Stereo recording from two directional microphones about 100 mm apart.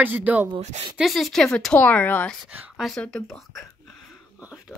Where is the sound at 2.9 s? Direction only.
5° left (ahead or behind).